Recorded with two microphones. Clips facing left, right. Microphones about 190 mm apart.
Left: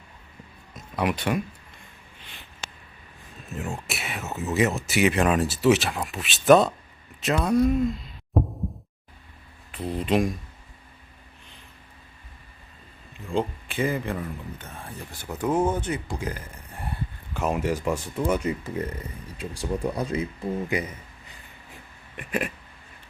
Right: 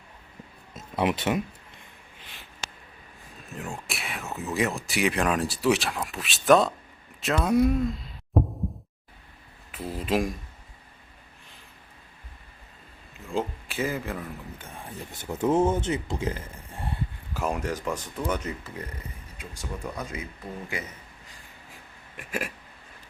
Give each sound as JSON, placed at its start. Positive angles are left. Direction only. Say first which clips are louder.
{"t": 0.8, "sound": "speech", "louder": "right 1 dB", "side_deg": -25}
{"t": 3.5, "sound": "speech", "louder": "left 3 dB", "side_deg": 0}
{"t": 9.7, "sound": "speech", "louder": "left 3 dB", "side_deg": 0}
{"t": 13.1, "sound": "speech", "louder": "left 3 dB", "side_deg": -5}
{"t": 14.8, "sound": "speech", "louder": "even", "side_deg": -20}
{"t": 17.3, "sound": "speech", "louder": "left 3 dB", "side_deg": 0}
{"t": 19.4, "sound": "speech", "louder": "left 9 dB", "side_deg": 30}
{"t": 22.2, "sound": "speech", "louder": "left 4 dB", "side_deg": 0}